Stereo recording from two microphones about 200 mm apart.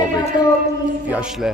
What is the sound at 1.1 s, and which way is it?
Speech, 5° right (ahead or behind).